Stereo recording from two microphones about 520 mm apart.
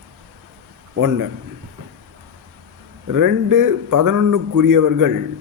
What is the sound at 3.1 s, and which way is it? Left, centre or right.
A man's voice, right.